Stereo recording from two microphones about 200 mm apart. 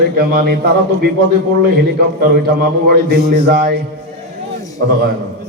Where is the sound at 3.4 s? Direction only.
50° right (ahead or behind).